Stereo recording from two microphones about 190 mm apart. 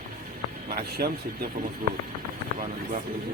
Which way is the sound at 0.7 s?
50° right (ahead or behind).